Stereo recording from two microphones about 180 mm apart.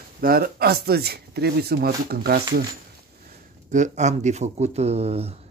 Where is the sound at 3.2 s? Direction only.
40° right (ahead or behind).